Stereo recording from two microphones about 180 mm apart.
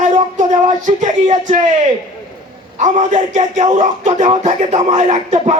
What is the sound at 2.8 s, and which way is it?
Speech, 45° right (ahead or behind).